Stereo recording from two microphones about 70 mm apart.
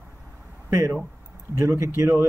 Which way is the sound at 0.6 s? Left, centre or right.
Right.